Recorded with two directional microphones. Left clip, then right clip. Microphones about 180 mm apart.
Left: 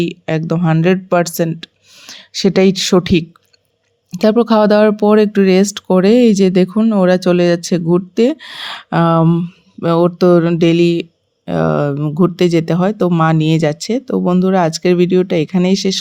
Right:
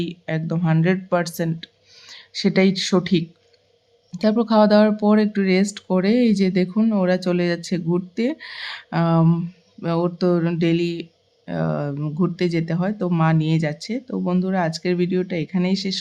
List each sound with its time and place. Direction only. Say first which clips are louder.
0.0 s speech: left 9 dB; 35° left (ahead or behind)